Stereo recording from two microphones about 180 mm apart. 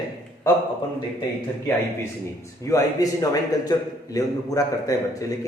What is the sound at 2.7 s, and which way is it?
A man's voice, 20° left (ahead or behind).